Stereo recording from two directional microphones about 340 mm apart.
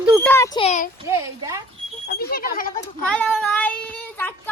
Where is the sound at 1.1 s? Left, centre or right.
Centre.